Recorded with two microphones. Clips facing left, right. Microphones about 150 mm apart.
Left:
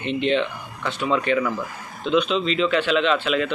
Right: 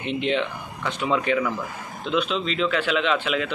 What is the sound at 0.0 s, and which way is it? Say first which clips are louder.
Speech: left 3 dB; 15° right (ahead or behind).